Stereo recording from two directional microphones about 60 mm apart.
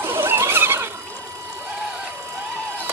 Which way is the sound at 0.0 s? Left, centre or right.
Right.